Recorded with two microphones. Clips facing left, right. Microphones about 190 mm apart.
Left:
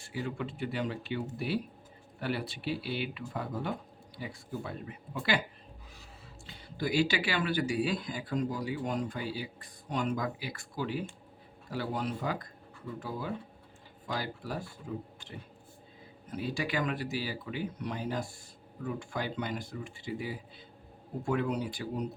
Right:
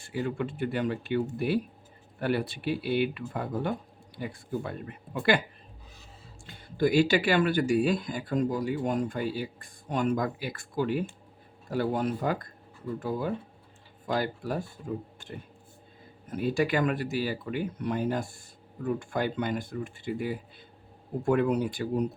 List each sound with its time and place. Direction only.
0.0 s speech: 55° right (ahead or behind)
6.4 s speech: 50° right (ahead or behind)